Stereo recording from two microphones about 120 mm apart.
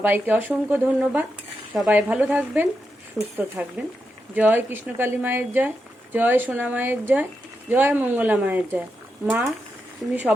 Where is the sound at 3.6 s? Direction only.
10° right (ahead or behind).